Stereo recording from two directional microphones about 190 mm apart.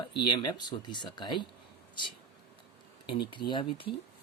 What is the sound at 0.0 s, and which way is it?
Speech, 25° left (ahead or behind).